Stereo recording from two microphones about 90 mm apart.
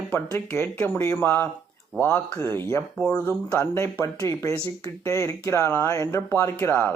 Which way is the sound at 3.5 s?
30° left (ahead or behind).